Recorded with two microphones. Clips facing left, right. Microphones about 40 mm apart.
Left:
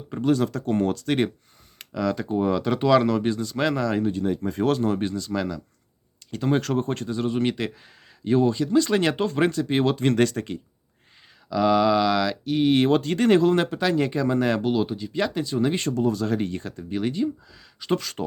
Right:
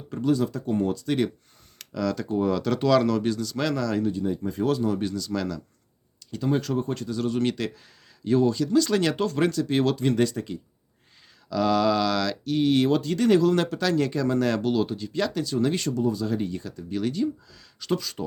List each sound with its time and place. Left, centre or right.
0.2 s speech: left
1.8 s speech: left
4.1 s speech: left
4.9 s speech: left
6.3 s speech: left
7.2 s speech: left
10.0 s speech: left
11.4 s speech: centre
12.7 s speech: left
13.5 s speech: left
15.8 s speech: left
16.0 s speech: left
16.9 s speech: left
17.9 s speech: left